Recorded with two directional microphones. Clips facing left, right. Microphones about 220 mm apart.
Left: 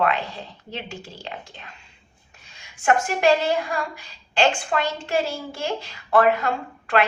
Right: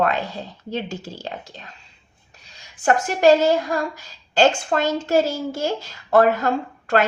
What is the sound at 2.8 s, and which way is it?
A woman's voice, 40° right (ahead or behind).